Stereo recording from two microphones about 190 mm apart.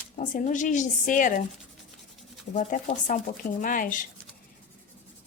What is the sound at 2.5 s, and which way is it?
Speech, 40° left (ahead or behind).